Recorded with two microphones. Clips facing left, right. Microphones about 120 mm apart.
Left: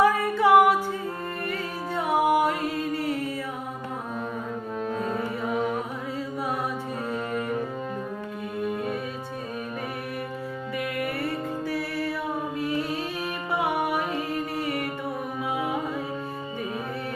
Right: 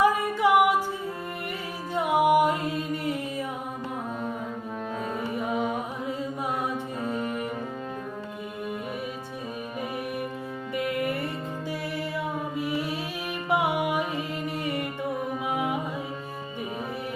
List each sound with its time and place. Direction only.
0.0 s music: 15° right (ahead or behind)
2.1 s mantra: 20° right (ahead or behind)
5.2 s music: 20° right (ahead or behind)
7.1 s music: 20° right (ahead or behind)
10.8 s music: 20° right (ahead or behind)